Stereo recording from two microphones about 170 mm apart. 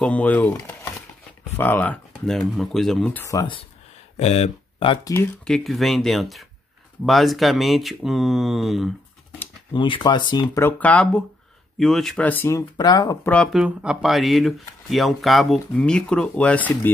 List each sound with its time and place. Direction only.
0.0 s speech: 10° left (ahead or behind); by 3.6 s 25° left (ahead or behind)
4.2 s speech: 40° left (ahead or behind)
5.4 s speech: centre (ahead or behind)
9.7 s speech: 30° left (ahead or behind)
10.6 s speech: 10° left (ahead or behind)
13.3 s speech: centre (ahead or behind)